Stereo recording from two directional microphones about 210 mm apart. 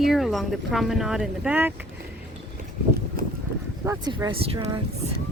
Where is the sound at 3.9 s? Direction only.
20° right (ahead or behind).